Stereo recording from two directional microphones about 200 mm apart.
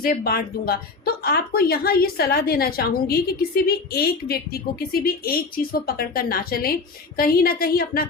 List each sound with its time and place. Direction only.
0.0 s a woman's voice: 45° left (ahead or behind)